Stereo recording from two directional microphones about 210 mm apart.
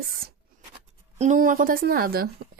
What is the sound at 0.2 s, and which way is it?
A woman's voice, 45° right (ahead or behind).